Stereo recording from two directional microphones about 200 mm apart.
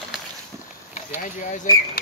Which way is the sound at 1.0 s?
40° left (ahead or behind).